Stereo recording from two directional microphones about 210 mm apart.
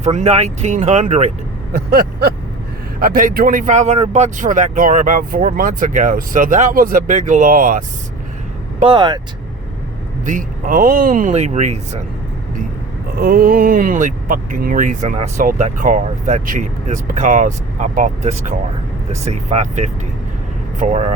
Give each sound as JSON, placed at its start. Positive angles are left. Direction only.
{"t": 0.0, "sound": "speech", "side_deg": -35}
{"t": 1.7, "sound": "vehicle", "side_deg": -45}
{"t": 3.0, "sound": "speech", "side_deg": -40}
{"t": 8.8, "sound": "speech", "side_deg": -20}
{"t": 10.2, "sound": "speech", "side_deg": -40}
{"t": 13.1, "sound": "speech", "side_deg": -45}